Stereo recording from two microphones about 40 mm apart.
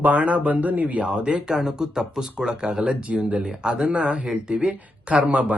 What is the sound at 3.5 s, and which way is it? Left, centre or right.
Speech, centre.